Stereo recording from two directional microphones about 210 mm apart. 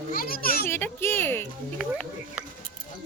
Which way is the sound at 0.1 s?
45° left (ahead or behind).